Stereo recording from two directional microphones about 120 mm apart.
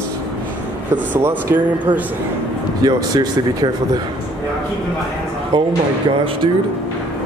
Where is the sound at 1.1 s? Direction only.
20° right (ahead or behind).